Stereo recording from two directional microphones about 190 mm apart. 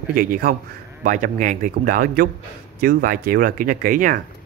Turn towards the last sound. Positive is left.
turn(degrees=-45)  # may be behind; listen again after turning